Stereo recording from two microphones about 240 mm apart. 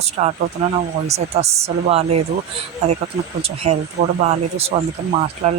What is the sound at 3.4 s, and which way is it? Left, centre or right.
Speech, right.